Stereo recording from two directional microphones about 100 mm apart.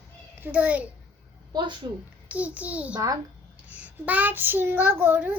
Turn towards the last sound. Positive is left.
turn(degrees=-20)  # may be behind; listen again after turning